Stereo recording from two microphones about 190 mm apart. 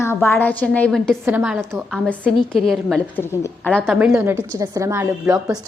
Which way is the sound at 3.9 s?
5° right (ahead or behind).